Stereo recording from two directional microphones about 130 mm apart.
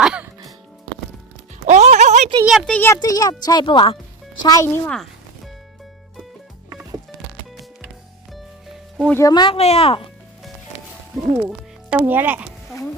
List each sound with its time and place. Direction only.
0.0 s music: 5° right (ahead or behind)
1.6 s a sound: 60° right (ahead or behind)
2.4 s speech: centre (ahead or behind)
2.7 s speech: 15° left (ahead or behind)
3.0 s speech: 30° left (ahead or behind)
4.4 s speech: 20° left (ahead or behind)
8.3 s music: centre (ahead or behind)
9.1 s speech: 30° left (ahead or behind)
9.6 s speech: 50° left (ahead or behind)
11.4 s speech: 15° right (ahead or behind)